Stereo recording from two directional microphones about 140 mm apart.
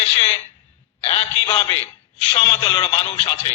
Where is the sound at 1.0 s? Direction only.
45° left (ahead or behind).